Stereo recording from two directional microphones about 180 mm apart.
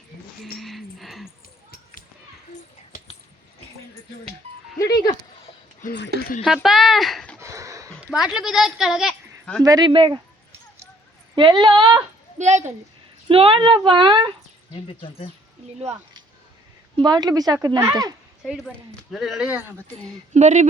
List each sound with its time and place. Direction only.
0.5 s a sound: centre (ahead or behind)
4.8 s dog: 65° left (ahead or behind)
5.8 s a sound: 45° left (ahead or behind)
6.4 s speech: centre (ahead or behind)
7.3 s a sound: 15° right (ahead or behind)
8.0 s speech: 5° right (ahead or behind)
9.6 s speech: 25° right (ahead or behind)
11.3 s speech: 25° right (ahead or behind)
12.4 s speech: 40° right (ahead or behind)
14.7 s speech: 30° left (ahead or behind)
17.0 s speech: 20° right (ahead or behind)
18.4 s speech: centre (ahead or behind)
20.3 s speech: 40° right (ahead or behind)